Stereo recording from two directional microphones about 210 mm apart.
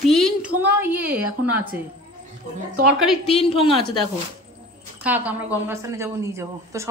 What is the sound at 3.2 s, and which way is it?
Speech, 25° left (ahead or behind).